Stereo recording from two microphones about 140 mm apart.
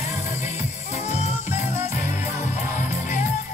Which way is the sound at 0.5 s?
55° left (ahead or behind).